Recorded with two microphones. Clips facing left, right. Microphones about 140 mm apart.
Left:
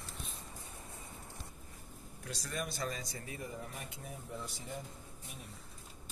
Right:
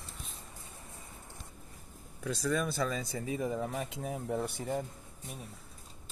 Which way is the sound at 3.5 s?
90° right.